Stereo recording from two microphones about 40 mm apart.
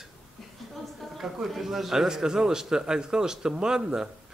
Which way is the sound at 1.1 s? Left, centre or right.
Centre.